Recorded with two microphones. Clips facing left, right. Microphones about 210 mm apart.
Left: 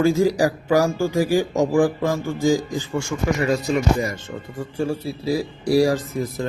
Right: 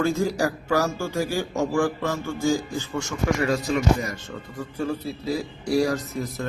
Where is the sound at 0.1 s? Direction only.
30° left (ahead or behind).